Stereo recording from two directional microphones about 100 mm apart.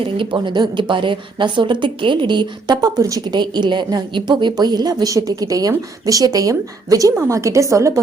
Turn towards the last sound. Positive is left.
turn(degrees=-30)  # may be behind; listen again after turning